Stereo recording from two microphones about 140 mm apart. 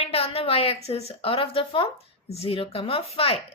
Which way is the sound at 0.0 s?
45° left (ahead or behind).